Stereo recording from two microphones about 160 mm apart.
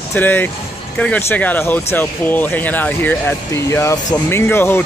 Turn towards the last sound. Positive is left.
turn(degrees=15)  # may be behind; listen again after turning